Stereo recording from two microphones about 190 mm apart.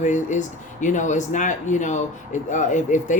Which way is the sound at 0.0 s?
40° left (ahead or behind).